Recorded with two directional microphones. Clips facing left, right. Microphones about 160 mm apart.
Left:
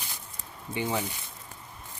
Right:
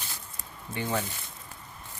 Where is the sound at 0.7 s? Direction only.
15° left (ahead or behind).